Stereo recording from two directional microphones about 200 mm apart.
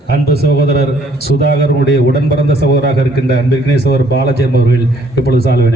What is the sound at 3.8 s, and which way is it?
Speech, 55° left (ahead or behind).